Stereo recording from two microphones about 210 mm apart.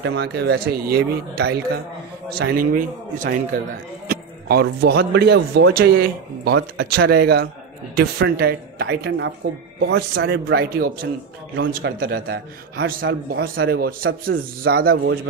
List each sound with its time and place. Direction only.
0.0 s a man's voice: 55° right (ahead or behind)